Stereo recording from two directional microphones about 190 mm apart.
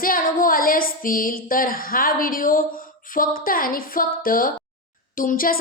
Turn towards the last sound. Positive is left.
turn(degrees=45)  # may be behind; listen again after turning